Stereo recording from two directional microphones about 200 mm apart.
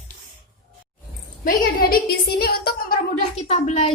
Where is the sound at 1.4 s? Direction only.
50° left (ahead or behind).